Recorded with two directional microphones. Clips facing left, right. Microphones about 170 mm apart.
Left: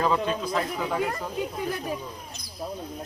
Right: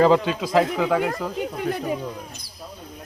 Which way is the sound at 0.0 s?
90° right.